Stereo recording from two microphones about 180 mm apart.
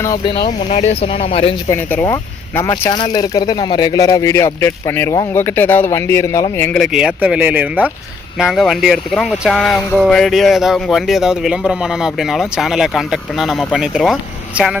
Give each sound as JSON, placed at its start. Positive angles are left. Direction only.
{"t": 0.0, "sound": "speech", "side_deg": 20}
{"t": 0.4, "sound": "speech", "side_deg": 35}
{"t": 1.7, "sound": "speech", "side_deg": 10}
{"t": 2.8, "sound": "speech", "side_deg": 25}
{"t": 6.7, "sound": "speech", "side_deg": 0}